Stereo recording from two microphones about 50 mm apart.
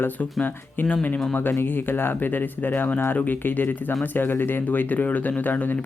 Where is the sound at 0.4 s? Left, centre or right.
Left.